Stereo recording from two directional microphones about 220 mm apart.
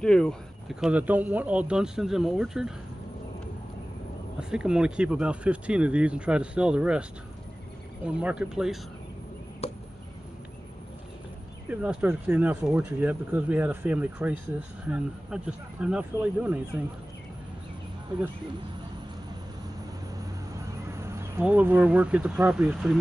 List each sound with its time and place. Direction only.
0.0 s speech: 5° left (ahead or behind)
4.4 s speech: 5° right (ahead or behind)
9.6 s chop: 25° left (ahead or behind)
11.7 s speech: 5° right (ahead or behind)
21.0 s speech: 10° right (ahead or behind)